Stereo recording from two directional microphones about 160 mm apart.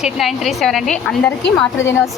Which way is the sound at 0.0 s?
Centre (ahead or behind).